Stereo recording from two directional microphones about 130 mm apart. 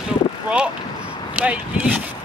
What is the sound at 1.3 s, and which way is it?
Speech, 10° right (ahead or behind).